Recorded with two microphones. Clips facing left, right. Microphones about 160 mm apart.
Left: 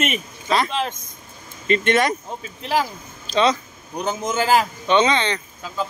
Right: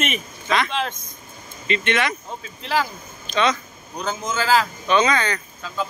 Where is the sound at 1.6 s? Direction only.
45° left (ahead or behind).